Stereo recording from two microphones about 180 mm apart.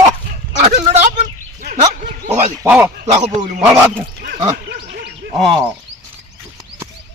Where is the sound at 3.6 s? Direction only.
15° right (ahead or behind).